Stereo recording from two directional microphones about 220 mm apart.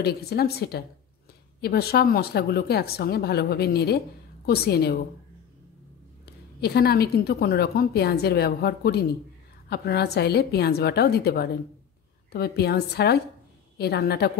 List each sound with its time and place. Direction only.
0.0 s a woman's voice: 45° left (ahead or behind)
6.2 s a woman's voice: 45° left (ahead or behind)